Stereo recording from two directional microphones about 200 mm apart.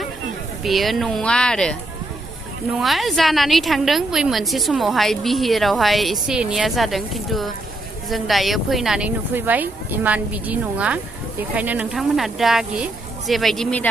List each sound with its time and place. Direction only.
0.6 s a woman's voice: centre (ahead or behind)
2.7 s a woman's voice: centre (ahead or behind)